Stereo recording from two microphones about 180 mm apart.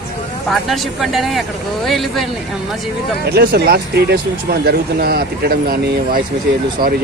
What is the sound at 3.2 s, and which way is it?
Speech, 65° right (ahead or behind).